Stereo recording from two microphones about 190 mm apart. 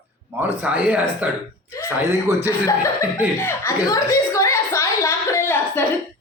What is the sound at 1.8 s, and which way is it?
Speech, 15° left (ahead or behind).